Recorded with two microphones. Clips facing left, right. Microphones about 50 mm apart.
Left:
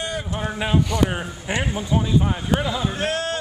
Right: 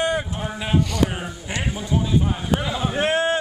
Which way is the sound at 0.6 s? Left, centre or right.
Centre.